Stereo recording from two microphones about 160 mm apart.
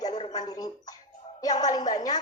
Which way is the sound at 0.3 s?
25° left (ahead or behind).